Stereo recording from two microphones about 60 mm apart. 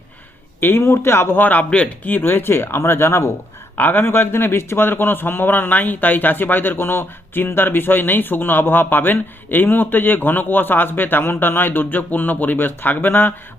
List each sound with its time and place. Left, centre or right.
0.6 s speech: left
1.4 s a man's voice: left
3.8 s a man's voice: left